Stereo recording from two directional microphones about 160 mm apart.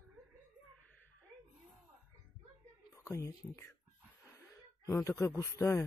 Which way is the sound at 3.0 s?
20° left (ahead or behind).